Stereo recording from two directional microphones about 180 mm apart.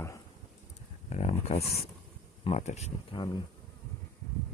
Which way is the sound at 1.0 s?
35° left (ahead or behind).